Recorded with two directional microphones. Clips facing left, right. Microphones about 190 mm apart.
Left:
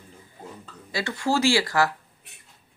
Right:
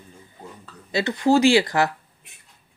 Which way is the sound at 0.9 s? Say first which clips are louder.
Right 6 dB; 20° right (ahead or behind).